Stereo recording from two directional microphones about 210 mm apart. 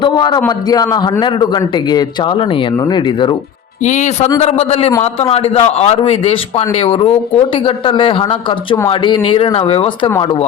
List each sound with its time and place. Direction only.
0.0 s a man's voice: 20° left (ahead or behind)
3.8 s a man's voice: 35° left (ahead or behind)
4.9 s a man's voice: 20° left (ahead or behind)
5.3 s a man's voice: 30° left (ahead or behind)